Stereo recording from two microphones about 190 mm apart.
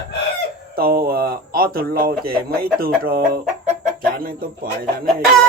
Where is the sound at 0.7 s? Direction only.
55° right (ahead or behind).